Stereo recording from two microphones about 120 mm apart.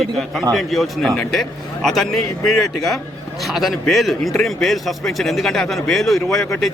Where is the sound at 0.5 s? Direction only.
Centre (ahead or behind).